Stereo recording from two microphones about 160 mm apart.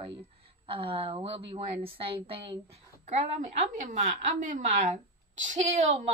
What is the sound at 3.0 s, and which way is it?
A woman's voice, 50° right (ahead or behind).